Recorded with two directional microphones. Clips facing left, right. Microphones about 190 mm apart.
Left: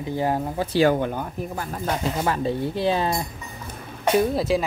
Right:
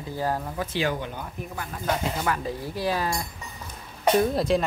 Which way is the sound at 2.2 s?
30° left (ahead or behind).